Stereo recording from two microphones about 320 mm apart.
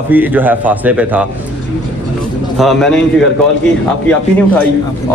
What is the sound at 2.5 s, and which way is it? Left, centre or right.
Speech, centre.